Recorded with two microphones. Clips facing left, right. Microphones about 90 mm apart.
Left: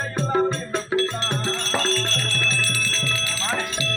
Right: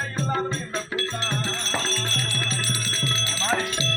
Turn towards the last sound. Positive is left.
turn(degrees=-25)  # may be behind; listen again after turning